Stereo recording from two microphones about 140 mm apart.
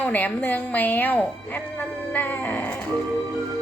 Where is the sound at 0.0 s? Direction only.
10° left (ahead or behind).